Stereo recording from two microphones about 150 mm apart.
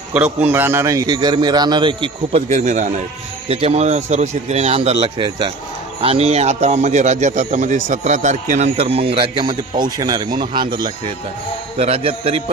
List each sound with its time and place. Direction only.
0.1 s a man's voice: 10° right (ahead or behind); by 2.4 s 35° right (ahead or behind)
2.5 s a man's voice: 55° right (ahead or behind)
3.5 s a man's voice: 45° right (ahead or behind)